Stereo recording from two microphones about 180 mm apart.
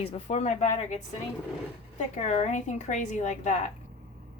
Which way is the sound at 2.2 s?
40° left (ahead or behind).